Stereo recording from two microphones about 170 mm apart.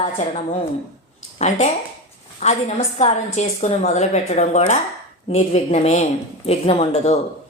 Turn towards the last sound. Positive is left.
turn(degrees=40)  # may be behind; listen again after turning